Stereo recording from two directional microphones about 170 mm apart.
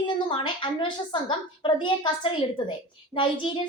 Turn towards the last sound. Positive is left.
turn(degrees=30)  # may be behind; listen again after turning